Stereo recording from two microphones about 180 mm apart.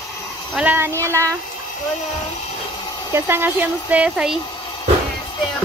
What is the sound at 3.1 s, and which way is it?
Speech, 10° right (ahead or behind).